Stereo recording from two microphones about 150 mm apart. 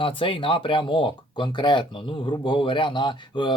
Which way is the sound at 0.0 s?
35° left (ahead or behind).